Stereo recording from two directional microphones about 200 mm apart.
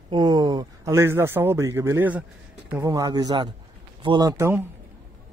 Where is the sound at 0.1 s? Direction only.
20° right (ahead or behind).